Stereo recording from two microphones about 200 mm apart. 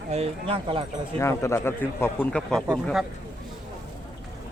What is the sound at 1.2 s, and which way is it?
Speech, 15° left (ahead or behind).